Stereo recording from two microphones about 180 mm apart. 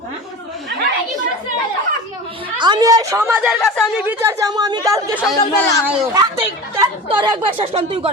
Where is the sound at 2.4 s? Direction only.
25° right (ahead or behind); by 4.0 s centre (ahead or behind).